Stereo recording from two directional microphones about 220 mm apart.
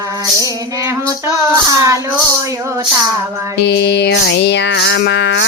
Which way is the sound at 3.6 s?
50° left (ahead or behind).